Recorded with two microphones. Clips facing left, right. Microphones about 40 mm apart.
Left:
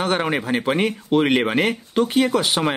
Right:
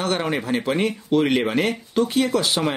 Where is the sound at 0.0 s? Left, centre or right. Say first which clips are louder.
Left 2 dB; left.